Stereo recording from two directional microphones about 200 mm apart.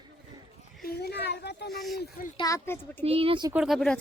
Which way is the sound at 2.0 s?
45° left (ahead or behind).